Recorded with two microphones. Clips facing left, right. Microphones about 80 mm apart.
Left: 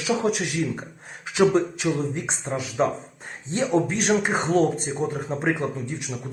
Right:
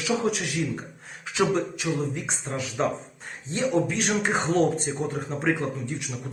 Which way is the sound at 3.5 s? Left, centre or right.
Left.